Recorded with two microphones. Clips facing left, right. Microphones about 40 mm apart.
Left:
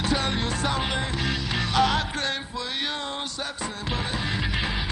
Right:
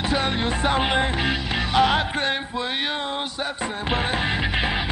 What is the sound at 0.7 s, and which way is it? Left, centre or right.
Music, right.